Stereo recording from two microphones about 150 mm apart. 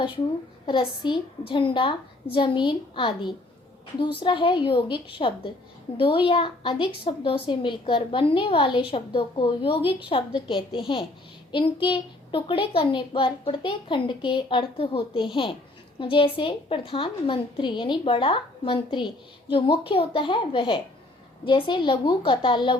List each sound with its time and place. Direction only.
0.6 s a woman's voice: 30° left (ahead or behind)